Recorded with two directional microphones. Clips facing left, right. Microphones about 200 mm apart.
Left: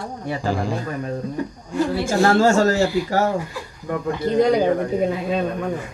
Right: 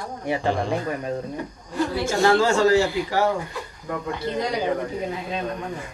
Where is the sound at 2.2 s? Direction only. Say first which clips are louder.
Left 2 dB; 45° left (ahead or behind).